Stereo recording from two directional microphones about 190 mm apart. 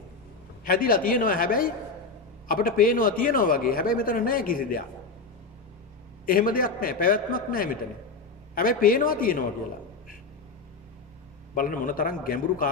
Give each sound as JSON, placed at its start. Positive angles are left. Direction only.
{"t": 0.6, "sound": "speech", "side_deg": 50}
{"t": 6.2, "sound": "speech", "side_deg": 45}
{"t": 11.5, "sound": "speech", "side_deg": 45}